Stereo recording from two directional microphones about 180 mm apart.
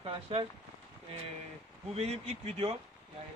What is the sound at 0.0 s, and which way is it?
Speech, 30° right (ahead or behind).